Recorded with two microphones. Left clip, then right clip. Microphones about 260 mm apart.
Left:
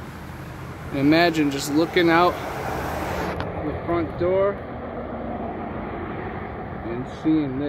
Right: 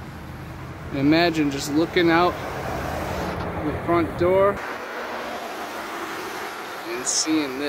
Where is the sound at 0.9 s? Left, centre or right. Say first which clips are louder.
Left 1 dB; centre.